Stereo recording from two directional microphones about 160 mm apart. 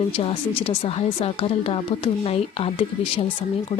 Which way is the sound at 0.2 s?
35° left (ahead or behind).